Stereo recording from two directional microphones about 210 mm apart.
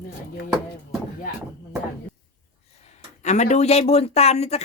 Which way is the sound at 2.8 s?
35° left (ahead or behind).